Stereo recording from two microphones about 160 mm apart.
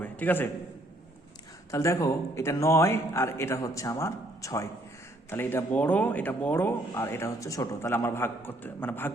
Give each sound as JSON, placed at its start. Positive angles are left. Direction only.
{"t": 0.0, "sound": "a man's voice", "side_deg": 10}
{"t": 1.7, "sound": "speech", "side_deg": 20}